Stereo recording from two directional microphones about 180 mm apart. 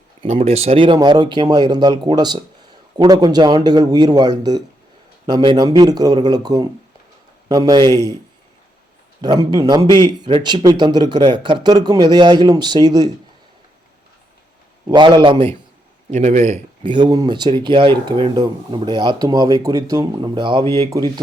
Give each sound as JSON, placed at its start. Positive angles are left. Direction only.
{"t": 0.3, "sound": "speech", "side_deg": -35}
{"t": 9.2, "sound": "speech", "side_deg": -25}
{"t": 14.8, "sound": "speech", "side_deg": -25}
{"t": 16.1, "sound": "speech", "side_deg": -40}
{"t": 16.8, "sound": "speech", "side_deg": -25}